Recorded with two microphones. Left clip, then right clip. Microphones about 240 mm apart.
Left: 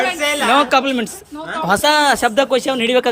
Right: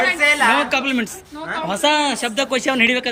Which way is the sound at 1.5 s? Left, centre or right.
Left.